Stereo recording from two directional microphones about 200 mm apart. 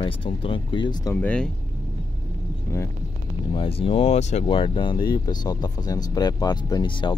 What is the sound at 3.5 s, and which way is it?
Speech, 25° left (ahead or behind).